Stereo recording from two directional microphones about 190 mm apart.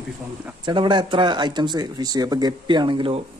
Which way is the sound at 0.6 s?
25° right (ahead or behind).